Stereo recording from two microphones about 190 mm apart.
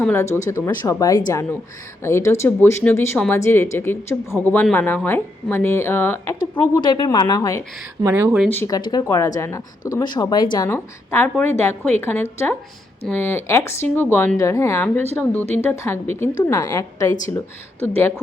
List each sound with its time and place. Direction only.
0.0 s speech: 10° left (ahead or behind)
6.8 s speech: 25° left (ahead or behind)
8.0 s speech: 10° right (ahead or behind)
8.4 s speech: 15° left (ahead or behind)